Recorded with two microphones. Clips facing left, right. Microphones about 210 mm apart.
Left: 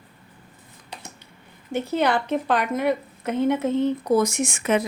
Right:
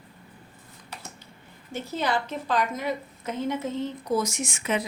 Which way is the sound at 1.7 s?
60° left (ahead or behind).